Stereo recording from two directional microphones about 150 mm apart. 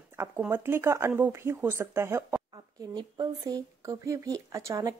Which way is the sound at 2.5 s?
30° right (ahead or behind).